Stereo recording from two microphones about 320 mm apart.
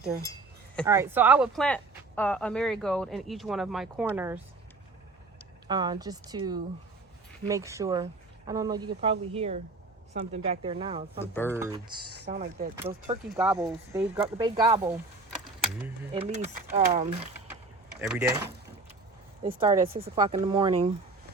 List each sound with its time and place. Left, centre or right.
0.9 s speech: centre
5.6 s speech: centre
12.3 s speech: right
13.3 s speech: centre
16.1 s speech: centre
18.1 s speech: centre